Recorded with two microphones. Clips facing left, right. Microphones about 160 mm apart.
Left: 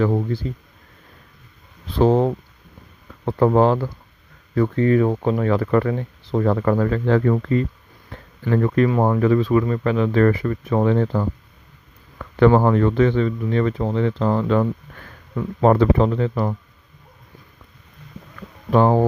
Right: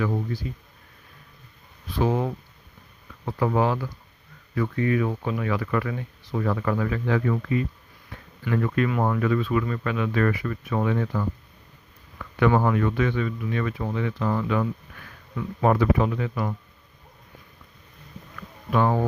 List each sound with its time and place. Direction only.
0.0 s speech: 40° left (ahead or behind)
1.9 s speech: 30° left (ahead or behind)
3.2 s speech: 50° left (ahead or behind)
18.3 s a sound: 35° left (ahead or behind)